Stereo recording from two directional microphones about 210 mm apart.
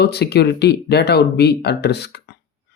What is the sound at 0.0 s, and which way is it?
Speech, 50° left (ahead or behind).